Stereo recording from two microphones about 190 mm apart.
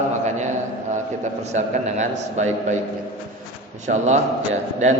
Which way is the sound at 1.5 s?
40° right (ahead or behind).